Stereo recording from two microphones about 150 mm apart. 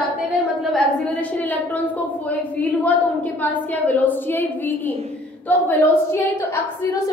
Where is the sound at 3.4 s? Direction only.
10° left (ahead or behind).